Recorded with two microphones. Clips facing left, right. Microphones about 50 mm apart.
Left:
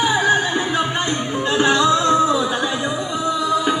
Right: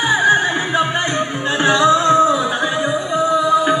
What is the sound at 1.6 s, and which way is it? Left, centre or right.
Music, right.